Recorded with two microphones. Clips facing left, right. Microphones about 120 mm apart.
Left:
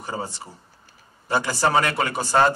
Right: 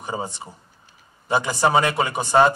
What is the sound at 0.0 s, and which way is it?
A man's voice, 20° right (ahead or behind).